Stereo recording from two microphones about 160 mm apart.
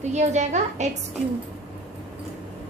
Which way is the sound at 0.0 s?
45° right (ahead or behind).